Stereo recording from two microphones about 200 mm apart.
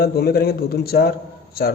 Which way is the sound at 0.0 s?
50° left (ahead or behind).